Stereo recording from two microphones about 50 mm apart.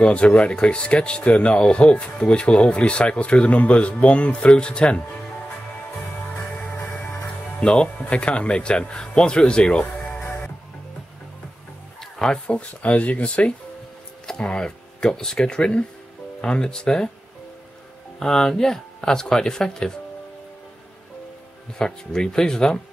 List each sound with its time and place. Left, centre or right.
0.0 s speech: left
6.5 s music: left
7.6 s speech: centre
12.0 s a sound: centre
12.4 s speech: left
18.2 s speech: centre
21.7 s speech: centre